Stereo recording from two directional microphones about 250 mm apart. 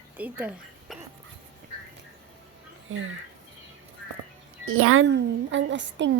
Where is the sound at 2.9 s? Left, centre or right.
Right.